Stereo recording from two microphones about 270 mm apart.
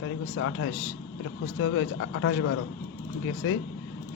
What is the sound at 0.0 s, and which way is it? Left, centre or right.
A man's voice, left.